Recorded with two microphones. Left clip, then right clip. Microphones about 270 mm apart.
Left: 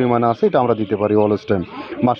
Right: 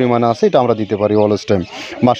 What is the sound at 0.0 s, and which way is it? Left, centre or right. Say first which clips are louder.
Speech: right 3 dB; right.